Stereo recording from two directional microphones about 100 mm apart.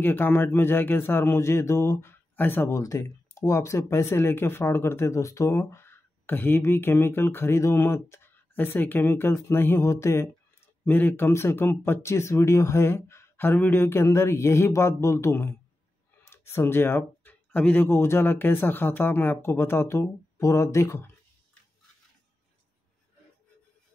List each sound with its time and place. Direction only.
0.0 s speech: 20° left (ahead or behind)
10.9 s speech: 20° left (ahead or behind)
17.8 s speech: 25° left (ahead or behind)